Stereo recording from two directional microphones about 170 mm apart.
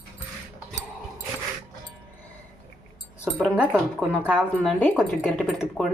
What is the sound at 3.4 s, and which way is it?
Speech, 5° right (ahead or behind).